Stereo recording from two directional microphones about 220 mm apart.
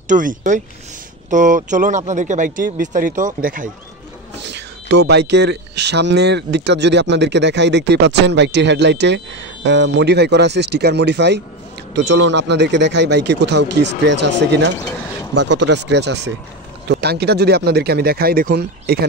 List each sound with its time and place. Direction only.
0.1 s speech: 35° right (ahead or behind)
4.4 s speech: 50° right (ahead or behind)
15.3 s speech: 55° right (ahead or behind)